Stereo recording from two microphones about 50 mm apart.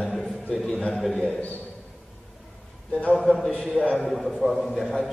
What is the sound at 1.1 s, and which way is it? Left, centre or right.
Speech, centre.